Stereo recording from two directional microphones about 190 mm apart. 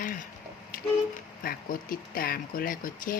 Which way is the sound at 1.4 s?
50° left (ahead or behind).